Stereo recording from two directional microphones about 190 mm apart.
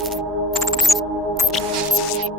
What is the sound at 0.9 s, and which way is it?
Music, 35° right (ahead or behind).